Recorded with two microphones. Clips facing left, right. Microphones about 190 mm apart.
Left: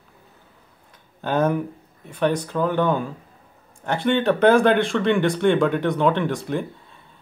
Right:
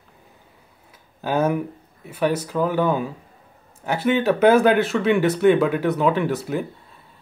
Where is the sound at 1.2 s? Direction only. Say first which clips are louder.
Even; 5° right (ahead or behind).